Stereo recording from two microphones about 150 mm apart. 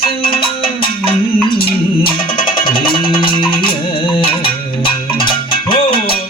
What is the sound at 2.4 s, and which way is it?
Music, 70° left (ahead or behind).